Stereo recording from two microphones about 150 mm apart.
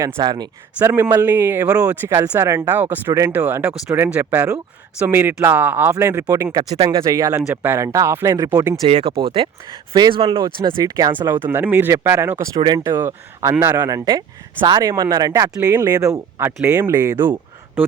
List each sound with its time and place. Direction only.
0.2 s speech: 25° right (ahead or behind)
0.9 s speech: 15° right (ahead or behind)
8.9 s speech: 40° right (ahead or behind)
11.3 s speech: 15° right (ahead or behind)